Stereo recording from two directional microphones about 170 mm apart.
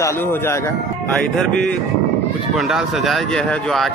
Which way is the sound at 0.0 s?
15° left (ahead or behind).